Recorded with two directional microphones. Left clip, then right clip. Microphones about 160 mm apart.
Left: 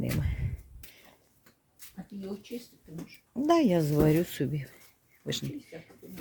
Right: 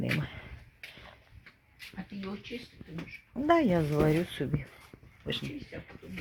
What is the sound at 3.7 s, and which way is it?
Speech, 50° left (ahead or behind).